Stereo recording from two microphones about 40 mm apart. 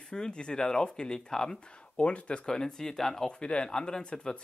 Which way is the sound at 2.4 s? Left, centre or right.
Centre.